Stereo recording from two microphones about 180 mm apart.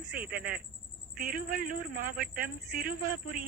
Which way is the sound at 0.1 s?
55° right (ahead or behind).